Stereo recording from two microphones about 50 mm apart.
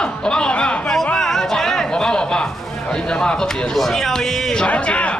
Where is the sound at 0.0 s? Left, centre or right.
Centre.